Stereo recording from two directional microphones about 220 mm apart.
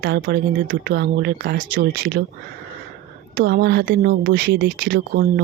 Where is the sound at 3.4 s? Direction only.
50° right (ahead or behind).